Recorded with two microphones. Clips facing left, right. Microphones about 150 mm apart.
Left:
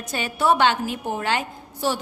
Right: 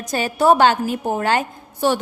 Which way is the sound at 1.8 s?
60° right (ahead or behind).